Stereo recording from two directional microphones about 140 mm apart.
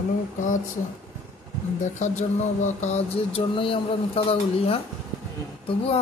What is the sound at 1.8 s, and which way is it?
Mantra, 55° left (ahead or behind).